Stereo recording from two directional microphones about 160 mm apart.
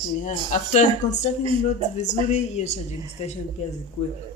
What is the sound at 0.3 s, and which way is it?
Speech, 50° left (ahead or behind).